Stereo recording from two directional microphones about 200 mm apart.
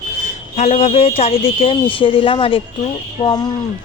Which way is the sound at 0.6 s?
35° left (ahead or behind).